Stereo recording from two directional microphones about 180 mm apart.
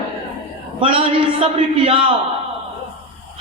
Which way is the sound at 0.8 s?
30° right (ahead or behind).